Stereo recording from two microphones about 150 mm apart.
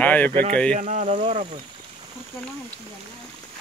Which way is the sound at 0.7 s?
55° right (ahead or behind).